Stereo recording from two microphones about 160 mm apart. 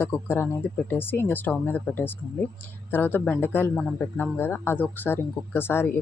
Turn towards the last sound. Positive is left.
turn(degrees=15)  # may be behind; listen again after turning